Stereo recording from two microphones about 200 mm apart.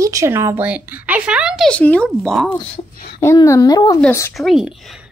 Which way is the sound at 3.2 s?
15° left (ahead or behind).